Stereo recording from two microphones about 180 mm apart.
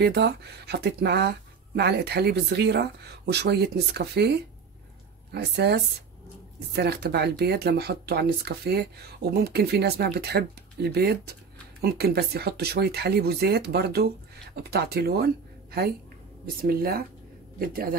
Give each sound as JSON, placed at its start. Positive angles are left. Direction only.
{"t": 0.0, "sound": "speech", "side_deg": -70}